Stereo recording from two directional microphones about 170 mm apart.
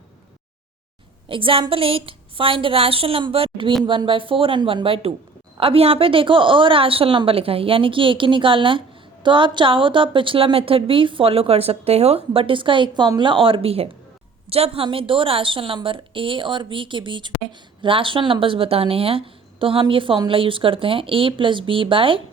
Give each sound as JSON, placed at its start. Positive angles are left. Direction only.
{"t": 1.3, "sound": "a woman's voice", "side_deg": -30}